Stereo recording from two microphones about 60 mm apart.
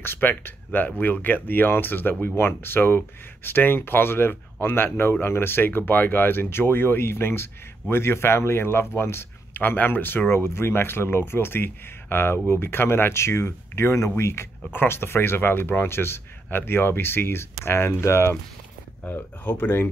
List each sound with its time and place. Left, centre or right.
0.0 s a sound: left
0.7 s speech: left
14.7 s speech: left
19.0 s speech: left